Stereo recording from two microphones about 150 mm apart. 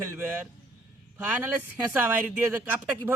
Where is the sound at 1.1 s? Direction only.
10° right (ahead or behind).